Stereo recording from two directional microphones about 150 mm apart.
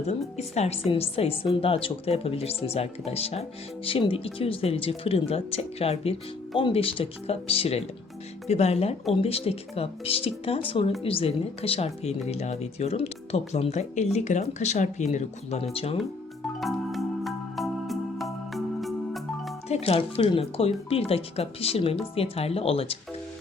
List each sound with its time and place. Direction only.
0.3 s speech: 45° left (ahead or behind)
16.6 s music: centre (ahead or behind)
19.6 s speech: 45° left (ahead or behind)